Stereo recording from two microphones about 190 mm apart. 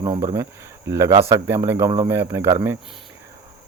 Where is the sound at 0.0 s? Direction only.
25° right (ahead or behind).